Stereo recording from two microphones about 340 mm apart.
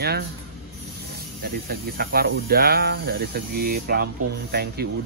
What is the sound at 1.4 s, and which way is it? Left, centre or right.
Speech, right.